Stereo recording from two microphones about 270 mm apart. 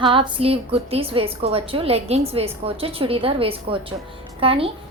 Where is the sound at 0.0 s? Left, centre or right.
Centre.